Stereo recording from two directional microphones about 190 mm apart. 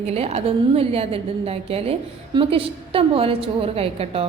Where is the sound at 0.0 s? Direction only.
35° right (ahead or behind).